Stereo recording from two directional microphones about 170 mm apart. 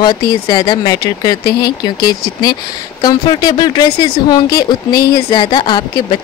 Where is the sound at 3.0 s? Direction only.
25° left (ahead or behind).